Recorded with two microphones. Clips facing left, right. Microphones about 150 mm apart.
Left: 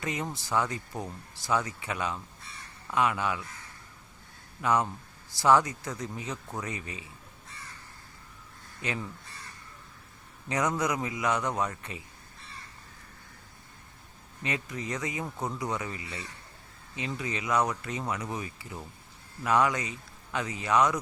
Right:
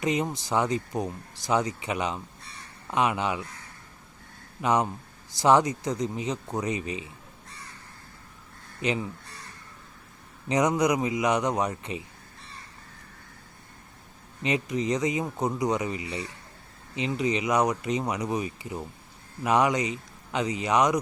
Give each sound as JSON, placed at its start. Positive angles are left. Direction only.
{"t": 0.0, "sound": "speech", "side_deg": -20}
{"t": 4.6, "sound": "speech", "side_deg": -20}
{"t": 8.8, "sound": "speech", "side_deg": -20}
{"t": 10.5, "sound": "speech", "side_deg": -20}
{"t": 14.4, "sound": "speech", "side_deg": -20}